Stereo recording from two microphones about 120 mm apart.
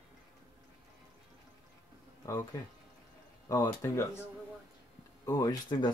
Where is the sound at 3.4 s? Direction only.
30° left (ahead or behind).